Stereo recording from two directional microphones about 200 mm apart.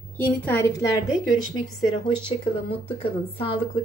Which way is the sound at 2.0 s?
25° left (ahead or behind).